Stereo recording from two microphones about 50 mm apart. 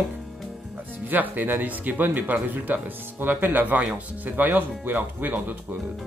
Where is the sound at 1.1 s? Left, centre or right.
Right.